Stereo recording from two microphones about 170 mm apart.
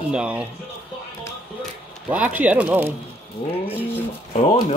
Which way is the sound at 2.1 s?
10° right (ahead or behind).